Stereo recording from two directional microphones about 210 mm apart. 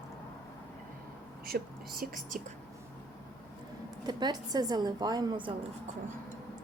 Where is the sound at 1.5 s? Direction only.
45° right (ahead or behind).